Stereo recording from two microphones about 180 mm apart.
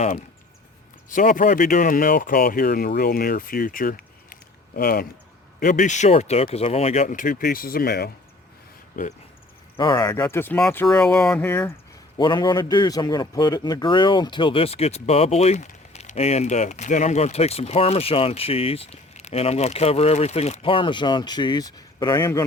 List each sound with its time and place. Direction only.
1.1 s speech: 45° left (ahead or behind)
8.9 s speech: 50° left (ahead or behind)
9.7 s speech: 25° left (ahead or behind); by 11.7 s 10° left (ahead or behind)
12.1 s a man's voice: 25° left (ahead or behind)